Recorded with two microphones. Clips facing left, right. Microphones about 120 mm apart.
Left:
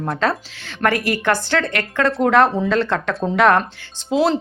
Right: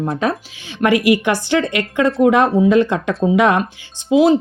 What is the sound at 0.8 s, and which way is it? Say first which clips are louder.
Speech: right 5 dB; 15° right (ahead or behind).